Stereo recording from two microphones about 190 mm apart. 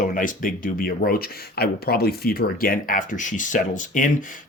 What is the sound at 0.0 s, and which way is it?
Speech, 45° left (ahead or behind).